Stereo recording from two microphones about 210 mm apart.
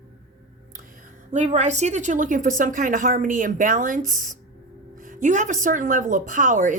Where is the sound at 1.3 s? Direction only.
35° right (ahead or behind).